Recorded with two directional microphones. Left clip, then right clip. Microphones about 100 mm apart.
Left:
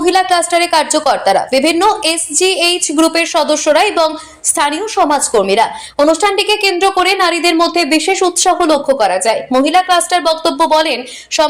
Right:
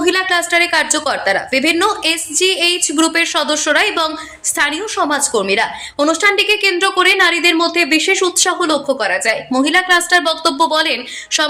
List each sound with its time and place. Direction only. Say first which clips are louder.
0.0 s a woman's voice: left 3 dB; 25° left (ahead or behind)